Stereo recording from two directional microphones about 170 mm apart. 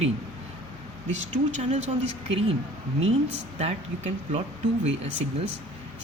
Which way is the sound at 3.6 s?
40° right (ahead or behind).